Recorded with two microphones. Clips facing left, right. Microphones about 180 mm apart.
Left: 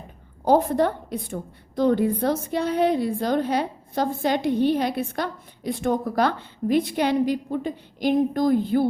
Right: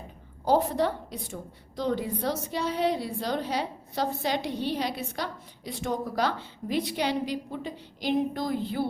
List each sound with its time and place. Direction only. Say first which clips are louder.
0.4 s a woman's voice: left 5 dB; 55° left (ahead or behind)